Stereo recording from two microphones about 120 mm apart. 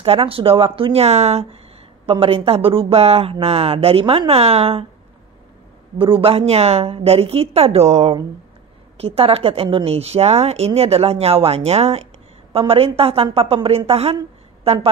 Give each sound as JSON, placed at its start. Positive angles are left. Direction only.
{"t": 0.0, "sound": "speech", "side_deg": -50}
{"t": 5.9, "sound": "a woman's voice", "side_deg": -45}